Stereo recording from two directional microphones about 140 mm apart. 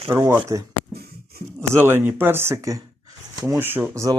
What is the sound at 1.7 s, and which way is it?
Speech, 15° right (ahead or behind).